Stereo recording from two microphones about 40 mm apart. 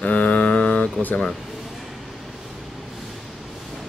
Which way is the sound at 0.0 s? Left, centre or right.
Left.